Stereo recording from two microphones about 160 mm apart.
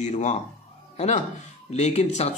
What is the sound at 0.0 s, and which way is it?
Speech, 45° left (ahead or behind).